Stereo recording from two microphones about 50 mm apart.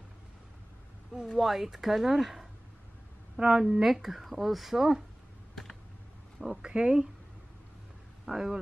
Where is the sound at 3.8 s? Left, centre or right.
Centre.